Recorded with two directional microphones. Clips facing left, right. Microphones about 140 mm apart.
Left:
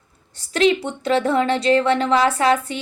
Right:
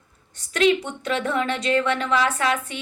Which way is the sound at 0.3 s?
30° left (ahead or behind).